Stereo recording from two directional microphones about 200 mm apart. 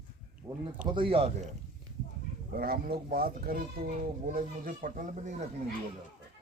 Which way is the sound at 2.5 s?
50° right (ahead or behind).